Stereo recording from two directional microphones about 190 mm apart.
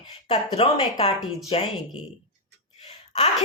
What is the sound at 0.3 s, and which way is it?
A woman's voice, 30° left (ahead or behind).